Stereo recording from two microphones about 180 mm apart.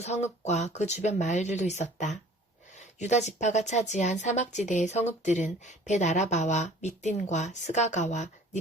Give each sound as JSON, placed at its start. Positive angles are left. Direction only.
{"t": 0.0, "sound": "a woman's voice", "side_deg": 40}